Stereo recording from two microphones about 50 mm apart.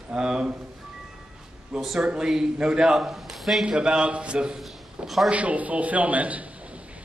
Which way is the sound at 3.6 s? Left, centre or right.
Centre.